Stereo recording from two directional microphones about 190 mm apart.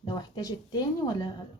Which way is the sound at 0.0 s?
25° left (ahead or behind).